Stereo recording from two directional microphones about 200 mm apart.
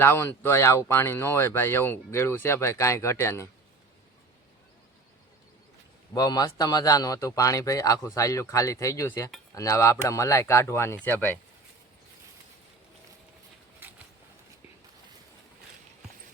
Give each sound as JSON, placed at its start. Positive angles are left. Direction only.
{"t": 0.0, "sound": "speech", "side_deg": 10}
{"t": 6.1, "sound": "speech", "side_deg": 20}